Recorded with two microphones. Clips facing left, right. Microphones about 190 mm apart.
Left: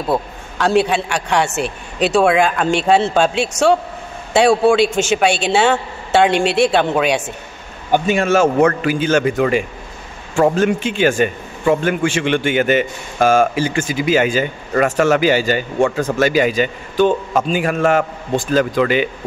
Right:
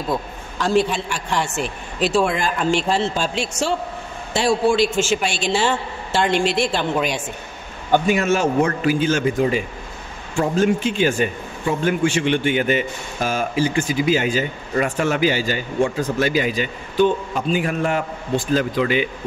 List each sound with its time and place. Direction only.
0.1 s a man's voice: 70° left (ahead or behind)
4.8 s a man's voice: 20° left (ahead or behind)
5.2 s a man's voice: 65° left (ahead or behind)
7.9 s a man's voice: 15° left (ahead or behind)
8.3 s a man's voice: 70° left (ahead or behind); by 13.5 s 90° left
14.1 s a man's voice: 80° left
16.5 s a man's voice: 90° left; by 18.9 s 70° left (ahead or behind)